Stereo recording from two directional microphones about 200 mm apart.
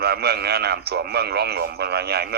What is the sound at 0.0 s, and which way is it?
Speech, 55° right (ahead or behind).